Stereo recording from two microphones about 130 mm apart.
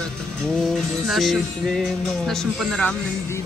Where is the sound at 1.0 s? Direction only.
Centre (ahead or behind).